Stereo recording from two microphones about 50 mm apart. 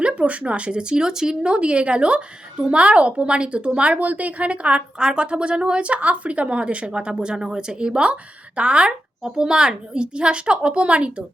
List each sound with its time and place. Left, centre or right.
0.0 s speech: right